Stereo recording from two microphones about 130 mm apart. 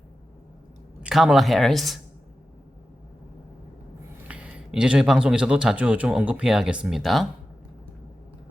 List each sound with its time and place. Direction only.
1.0 s speech: centre (ahead or behind)
4.3 s speech: 10° right (ahead or behind)